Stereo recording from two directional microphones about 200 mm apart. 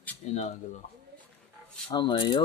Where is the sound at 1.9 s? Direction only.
20° left (ahead or behind).